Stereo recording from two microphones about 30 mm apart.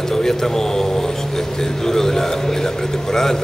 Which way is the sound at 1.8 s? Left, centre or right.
Centre.